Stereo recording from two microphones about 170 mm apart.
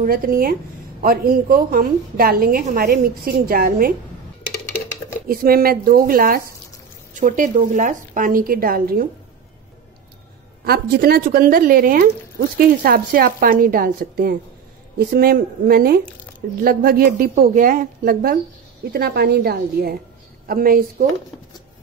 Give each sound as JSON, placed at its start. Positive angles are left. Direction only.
{"t": 0.0, "sound": "a woman's voice", "side_deg": -60}
{"t": 5.3, "sound": "a woman's voice", "side_deg": -60}
{"t": 10.6, "sound": "a woman's voice", "side_deg": -65}